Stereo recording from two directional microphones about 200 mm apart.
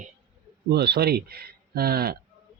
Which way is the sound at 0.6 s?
55° right (ahead or behind).